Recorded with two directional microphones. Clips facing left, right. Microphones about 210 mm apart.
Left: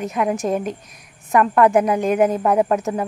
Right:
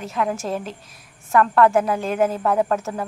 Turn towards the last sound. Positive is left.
turn(degrees=15)  # may be behind; listen again after turning